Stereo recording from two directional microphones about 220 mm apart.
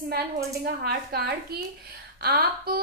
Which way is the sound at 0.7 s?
45° right (ahead or behind).